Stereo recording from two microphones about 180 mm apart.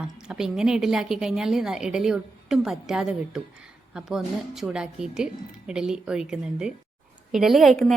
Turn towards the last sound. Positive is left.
turn(degrees=0)  # may be behind; listen again after turning